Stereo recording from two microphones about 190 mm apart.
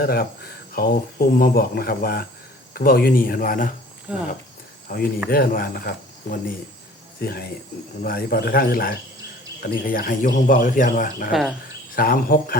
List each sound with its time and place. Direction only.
0.0 s speech: 50° left (ahead or behind)
4.1 s speech: 5° right (ahead or behind)
4.9 s speech: 50° left (ahead or behind)
11.3 s speech: centre (ahead or behind)
11.9 s speech: 50° left (ahead or behind)